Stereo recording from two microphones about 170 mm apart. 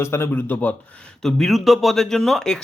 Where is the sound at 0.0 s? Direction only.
15° left (ahead or behind).